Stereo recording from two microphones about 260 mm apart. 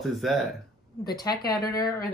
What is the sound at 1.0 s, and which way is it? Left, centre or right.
Speech, centre.